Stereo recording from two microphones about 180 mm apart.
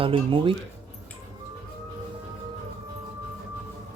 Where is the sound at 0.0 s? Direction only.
30° right (ahead or behind).